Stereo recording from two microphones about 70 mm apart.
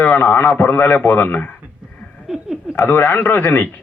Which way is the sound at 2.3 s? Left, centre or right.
Centre.